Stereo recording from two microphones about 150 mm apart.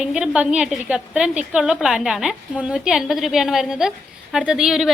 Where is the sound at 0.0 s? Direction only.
5° right (ahead or behind).